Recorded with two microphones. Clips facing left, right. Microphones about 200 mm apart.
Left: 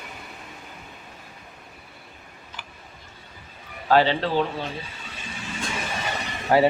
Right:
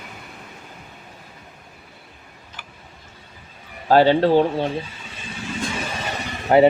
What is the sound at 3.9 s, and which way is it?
Speech, 45° right (ahead or behind).